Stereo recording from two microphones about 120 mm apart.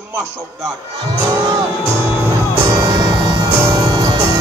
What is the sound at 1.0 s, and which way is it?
Speech, 40° right (ahead or behind).